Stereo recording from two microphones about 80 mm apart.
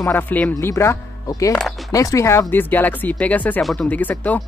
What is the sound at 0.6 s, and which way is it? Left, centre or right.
Speech, left.